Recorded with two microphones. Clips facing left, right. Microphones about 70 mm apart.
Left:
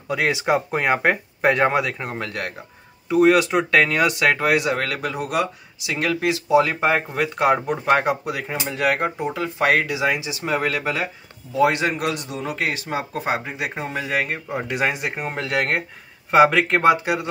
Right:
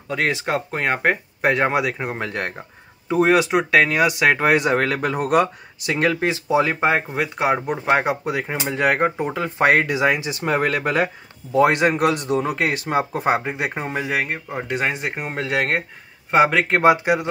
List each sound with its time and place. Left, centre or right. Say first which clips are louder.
0.1 s speech: left 2 dB; centre
4.3 s speech: right 2 dB; right
7.2 s speech: left 1 dB; centre
8.3 s speech: right 3 dB; right
14.0 s speech: left 2 dB; centre
14.5 s speech: left 1 dB; centre